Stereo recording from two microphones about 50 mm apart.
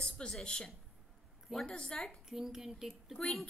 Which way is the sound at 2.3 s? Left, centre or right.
Centre.